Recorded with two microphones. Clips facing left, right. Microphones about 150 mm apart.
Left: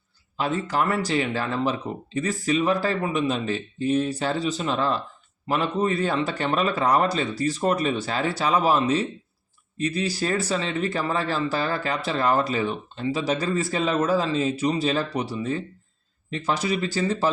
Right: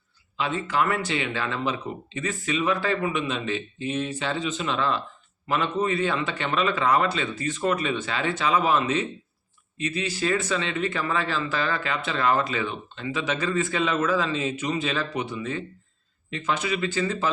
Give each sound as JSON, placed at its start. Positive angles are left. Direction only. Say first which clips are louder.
{"t": 0.3, "sound": "speech", "louder": "left 1 dB", "side_deg": 40}